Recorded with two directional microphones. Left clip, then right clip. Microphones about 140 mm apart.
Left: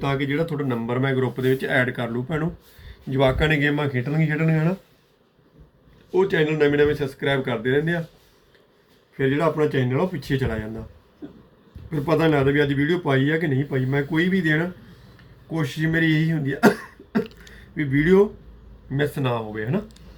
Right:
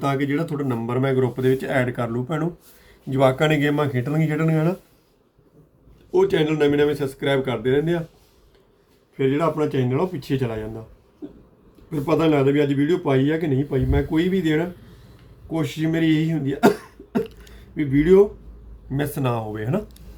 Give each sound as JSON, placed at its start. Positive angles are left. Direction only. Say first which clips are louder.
{"t": 0.0, "sound": "speech", "louder": "right 1 dB", "side_deg": -55}
{"t": 3.4, "sound": "speech", "louder": "right 1 dB", "side_deg": -45}
{"t": 6.1, "sound": "speech", "louder": "right 1 dB", "side_deg": -25}
{"t": 9.1, "sound": "speech", "louder": "even", "side_deg": -5}
{"t": 10.2, "sound": "speech", "louder": "right 1 dB", "side_deg": 0}
{"t": 11.9, "sound": "speech", "louder": "right 1 dB", "side_deg": -5}
{"t": 18.9, "sound": "speech", "louder": "left 1 dB", "side_deg": -35}